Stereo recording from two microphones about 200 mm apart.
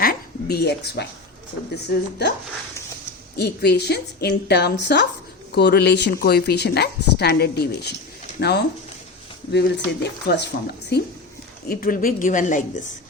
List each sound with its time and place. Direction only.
0.0 s a sound: 50° left (ahead or behind)
1.7 s speech: 55° left (ahead or behind)
3.3 s speech: 55° left (ahead or behind)
11.7 s a woman's voice: 45° left (ahead or behind)